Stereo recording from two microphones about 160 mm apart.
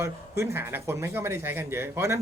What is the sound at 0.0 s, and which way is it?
Speech, 15° right (ahead or behind).